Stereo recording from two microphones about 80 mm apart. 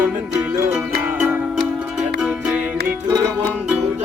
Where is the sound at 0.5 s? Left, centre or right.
Right.